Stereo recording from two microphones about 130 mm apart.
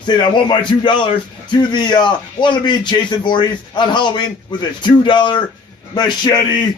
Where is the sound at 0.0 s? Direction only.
35° left (ahead or behind).